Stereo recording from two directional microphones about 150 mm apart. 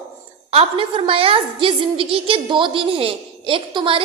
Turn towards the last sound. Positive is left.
turn(degrees=-35)  # may be behind; listen again after turning